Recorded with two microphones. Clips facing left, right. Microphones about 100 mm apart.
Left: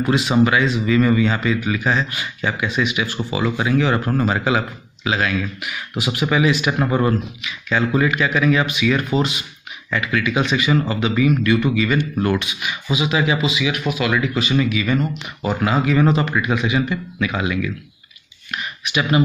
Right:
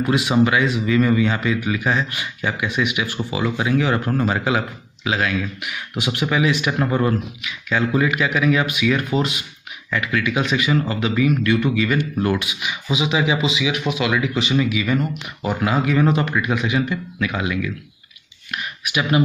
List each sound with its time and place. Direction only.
0.0 s speech: 5° right (ahead or behind)
7.4 s speech: centre (ahead or behind)
12.4 s speech: 15° right (ahead or behind)
14.4 s speech: 10° right (ahead or behind)
18.5 s a sound: centre (ahead or behind)